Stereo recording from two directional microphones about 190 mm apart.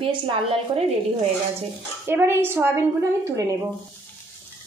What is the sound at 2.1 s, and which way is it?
A woman's voice, 10° right (ahead or behind).